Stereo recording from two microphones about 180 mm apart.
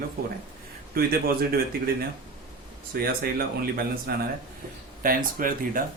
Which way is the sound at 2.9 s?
55° right (ahead or behind).